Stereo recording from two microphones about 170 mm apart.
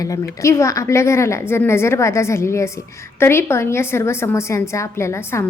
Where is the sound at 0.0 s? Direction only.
20° left (ahead or behind).